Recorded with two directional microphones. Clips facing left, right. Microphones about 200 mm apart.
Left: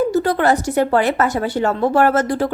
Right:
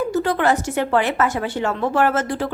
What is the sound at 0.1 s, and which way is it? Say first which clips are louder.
Speech: left 3 dB; 40° left (ahead or behind).